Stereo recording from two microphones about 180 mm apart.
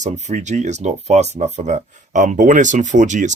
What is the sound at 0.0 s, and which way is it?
Speech, 40° right (ahead or behind).